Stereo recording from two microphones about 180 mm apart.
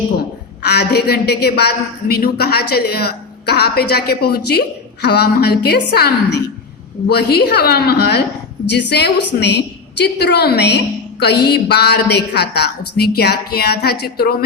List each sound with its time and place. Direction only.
0.6 s a woman's voice: 65° left (ahead or behind)